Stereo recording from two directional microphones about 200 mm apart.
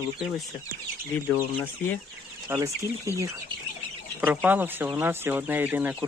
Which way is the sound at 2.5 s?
15° right (ahead or behind).